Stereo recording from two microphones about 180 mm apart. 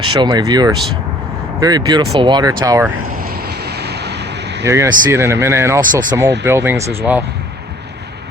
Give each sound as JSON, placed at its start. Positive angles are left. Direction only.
{"t": 0.1, "sound": "speech", "side_deg": -25}
{"t": 3.2, "sound": "vehicle", "side_deg": -60}
{"t": 4.6, "sound": "speech", "side_deg": -15}